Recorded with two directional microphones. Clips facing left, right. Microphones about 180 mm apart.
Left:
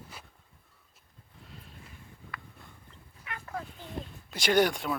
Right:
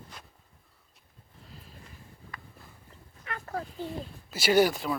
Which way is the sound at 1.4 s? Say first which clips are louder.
Even; centre (ahead or behind).